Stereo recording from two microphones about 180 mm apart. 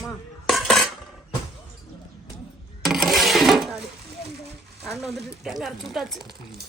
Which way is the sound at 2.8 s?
Centre (ahead or behind).